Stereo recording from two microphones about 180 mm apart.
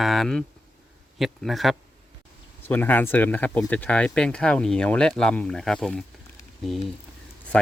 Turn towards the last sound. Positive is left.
turn(degrees=5)  # may be behind; listen again after turning